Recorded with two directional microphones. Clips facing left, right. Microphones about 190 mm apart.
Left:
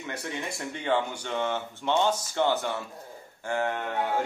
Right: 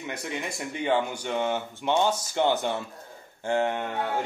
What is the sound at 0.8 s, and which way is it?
Speech, 15° right (ahead or behind).